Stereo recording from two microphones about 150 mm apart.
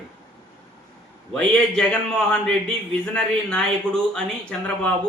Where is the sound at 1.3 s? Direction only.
5° left (ahead or behind).